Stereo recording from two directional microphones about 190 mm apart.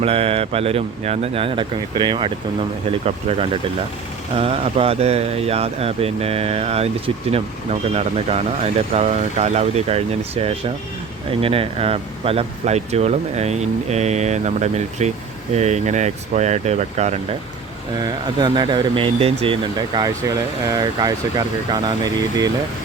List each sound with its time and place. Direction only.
0.0 s speech: 30° right (ahead or behind)
18.0 s speech: 20° right (ahead or behind)